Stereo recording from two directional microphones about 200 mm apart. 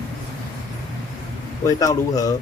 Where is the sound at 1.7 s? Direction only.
15° left (ahead or behind).